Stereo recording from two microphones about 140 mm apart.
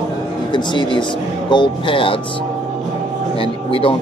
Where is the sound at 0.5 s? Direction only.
35° left (ahead or behind).